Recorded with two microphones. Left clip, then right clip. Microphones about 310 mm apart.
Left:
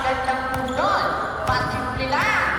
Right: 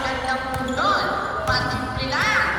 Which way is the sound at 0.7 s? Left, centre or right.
Left.